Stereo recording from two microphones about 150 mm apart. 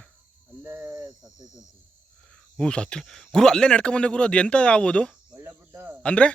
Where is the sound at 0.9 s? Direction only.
25° right (ahead or behind).